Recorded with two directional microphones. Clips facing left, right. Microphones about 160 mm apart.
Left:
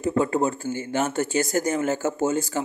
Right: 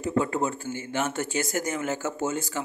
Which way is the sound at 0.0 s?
40° left (ahead or behind).